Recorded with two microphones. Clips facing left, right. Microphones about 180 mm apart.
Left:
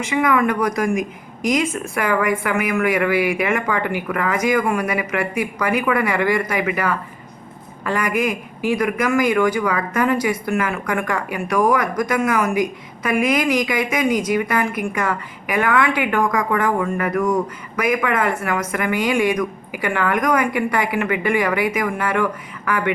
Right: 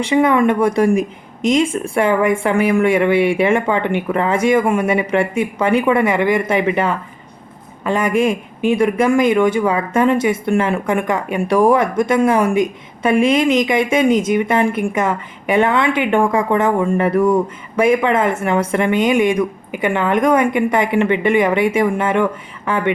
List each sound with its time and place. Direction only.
0.0 s speech: 30° right (ahead or behind)